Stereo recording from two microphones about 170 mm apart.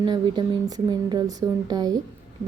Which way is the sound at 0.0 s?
25° right (ahead or behind).